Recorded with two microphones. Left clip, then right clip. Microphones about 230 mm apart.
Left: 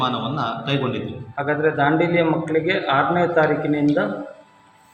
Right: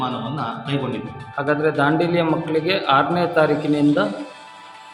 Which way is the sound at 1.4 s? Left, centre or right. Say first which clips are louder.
Right 1 dB; centre.